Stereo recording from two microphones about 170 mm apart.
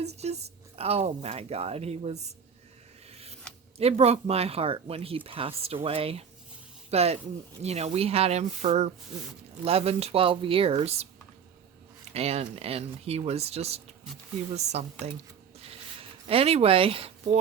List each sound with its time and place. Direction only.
0.2 s speech: 40° right (ahead or behind)
3.1 s scissors: 35° right (ahead or behind)
3.8 s speech: 35° right (ahead or behind)
12.1 s speech: 35° right (ahead or behind)
15.5 s a sound: 35° right (ahead or behind)